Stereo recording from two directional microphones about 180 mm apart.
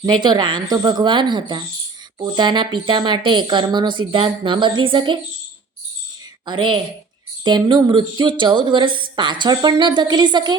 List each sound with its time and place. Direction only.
0.0 s a woman's voice: 25° right (ahead or behind)
6.4 s a woman's voice: 25° right (ahead or behind)